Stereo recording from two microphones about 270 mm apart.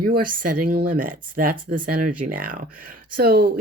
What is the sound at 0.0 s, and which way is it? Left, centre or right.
Speech, right.